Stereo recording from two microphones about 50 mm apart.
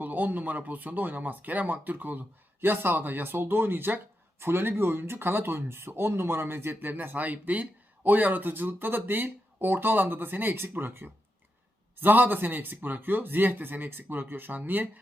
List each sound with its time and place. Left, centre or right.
0.0 s speech: right